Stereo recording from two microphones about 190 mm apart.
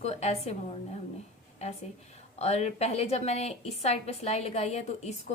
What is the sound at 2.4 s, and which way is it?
A woman's voice, 35° left (ahead or behind).